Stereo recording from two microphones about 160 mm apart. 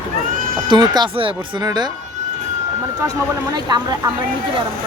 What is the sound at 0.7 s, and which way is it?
Speech, 25° right (ahead or behind).